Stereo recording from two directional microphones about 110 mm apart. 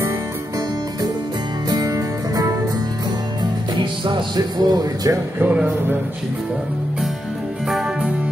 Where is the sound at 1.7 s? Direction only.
35° right (ahead or behind).